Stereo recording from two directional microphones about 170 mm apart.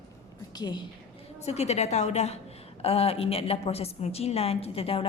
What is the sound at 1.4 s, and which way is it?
A woman's voice, 40° left (ahead or behind).